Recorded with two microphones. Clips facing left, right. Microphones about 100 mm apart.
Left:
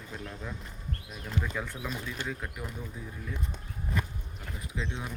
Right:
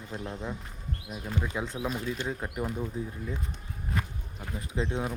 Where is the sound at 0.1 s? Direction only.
25° right (ahead or behind).